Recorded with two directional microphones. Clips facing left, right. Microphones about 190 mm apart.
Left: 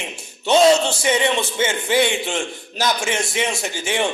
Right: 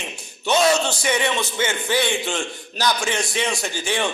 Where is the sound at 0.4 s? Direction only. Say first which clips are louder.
Left 4 dB; 25° left (ahead or behind).